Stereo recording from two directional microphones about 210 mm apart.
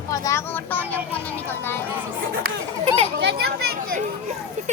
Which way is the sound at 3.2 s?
50° right (ahead or behind).